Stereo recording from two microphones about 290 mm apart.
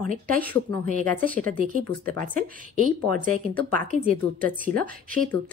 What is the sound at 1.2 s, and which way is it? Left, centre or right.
A woman's voice, right.